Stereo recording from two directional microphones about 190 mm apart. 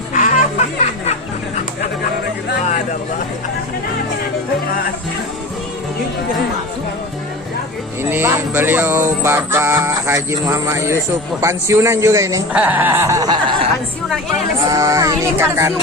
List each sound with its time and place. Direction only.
0.1 s music: 40° left (ahead or behind)
8.1 s music: 10° right (ahead or behind)
14.7 s music: 20° right (ahead or behind)